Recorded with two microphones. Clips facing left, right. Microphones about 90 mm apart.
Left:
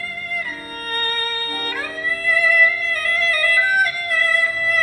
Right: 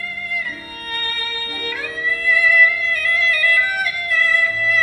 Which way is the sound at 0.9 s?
45° left (ahead or behind).